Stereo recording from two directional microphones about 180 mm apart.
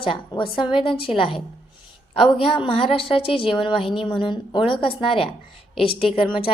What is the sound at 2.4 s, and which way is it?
A woman's voice, 30° left (ahead or behind).